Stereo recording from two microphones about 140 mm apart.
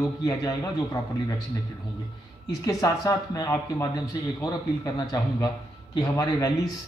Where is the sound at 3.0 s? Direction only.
25° left (ahead or behind).